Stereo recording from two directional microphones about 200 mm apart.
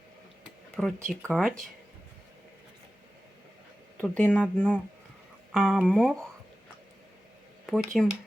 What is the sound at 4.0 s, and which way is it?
Speech, 5° left (ahead or behind).